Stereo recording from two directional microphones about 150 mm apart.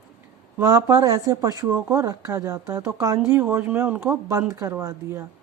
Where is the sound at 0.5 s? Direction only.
20° right (ahead or behind).